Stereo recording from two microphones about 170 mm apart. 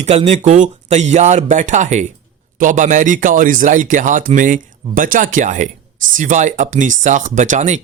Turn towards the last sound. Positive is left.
turn(degrees=-45)  # may be behind; listen again after turning